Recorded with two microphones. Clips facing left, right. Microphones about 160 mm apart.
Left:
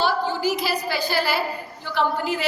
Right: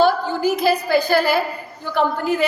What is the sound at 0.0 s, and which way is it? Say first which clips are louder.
A woman's voice: right 5 dB; 50° right (ahead or behind).